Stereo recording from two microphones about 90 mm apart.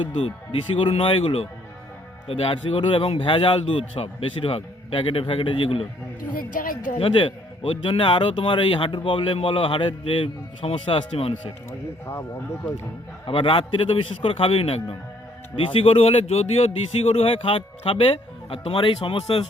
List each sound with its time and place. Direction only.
0.0 s speech: 90° left
7.0 s speech: 80° left
12.0 s speech: 30° left (ahead or behind)
13.2 s speech: 80° left